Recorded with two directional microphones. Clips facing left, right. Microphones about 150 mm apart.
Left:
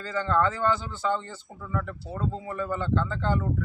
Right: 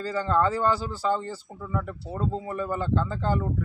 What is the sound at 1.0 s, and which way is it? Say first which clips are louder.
Speech: right 2 dB; 35° right (ahead or behind).